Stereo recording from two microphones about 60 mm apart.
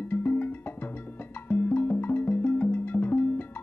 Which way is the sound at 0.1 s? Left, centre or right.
Left.